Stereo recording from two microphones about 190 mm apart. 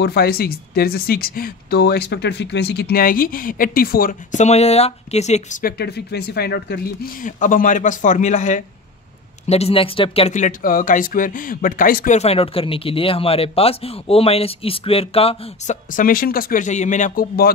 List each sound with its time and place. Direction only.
0.0 s speech: 55° left (ahead or behind)
12.2 s speech: 30° left (ahead or behind); by 17.5 s 50° left (ahead or behind)